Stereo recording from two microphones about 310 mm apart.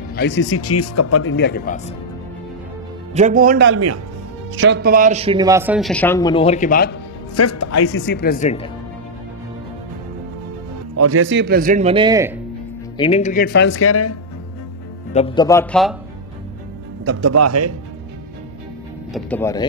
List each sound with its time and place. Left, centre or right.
0.1 s speech: left
1.3 s speech: left
3.2 s a man's voice: right; by 7.0 s left
7.3 s speech: left
7.9 s speech: left
11.0 s a man's voice: right; by 12.4 s centre
12.9 s speech: centre; by 14.1 s left
15.1 s a man's voice: centre
17.0 s speech: right
19.1 s a man's voice: centre